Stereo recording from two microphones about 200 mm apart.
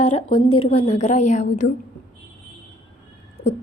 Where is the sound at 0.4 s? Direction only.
90° left.